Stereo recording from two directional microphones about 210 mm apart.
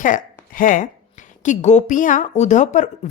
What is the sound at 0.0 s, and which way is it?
Speech, 40° left (ahead or behind).